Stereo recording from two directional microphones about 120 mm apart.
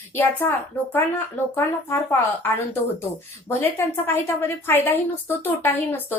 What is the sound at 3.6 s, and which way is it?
A woman's voice, 20° left (ahead or behind).